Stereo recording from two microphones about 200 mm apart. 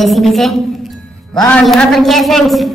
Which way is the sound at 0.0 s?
Centre (ahead or behind).